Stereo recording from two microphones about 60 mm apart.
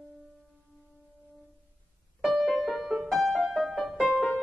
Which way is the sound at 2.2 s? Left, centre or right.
Centre.